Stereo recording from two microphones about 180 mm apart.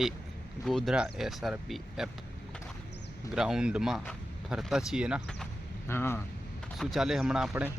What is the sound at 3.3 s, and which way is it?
Speech, 5° right (ahead or behind).